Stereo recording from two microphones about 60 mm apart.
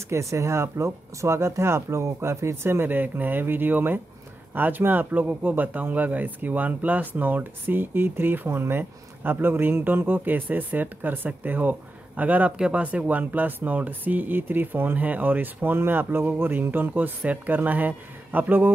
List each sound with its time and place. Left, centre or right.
0.1 s speech: right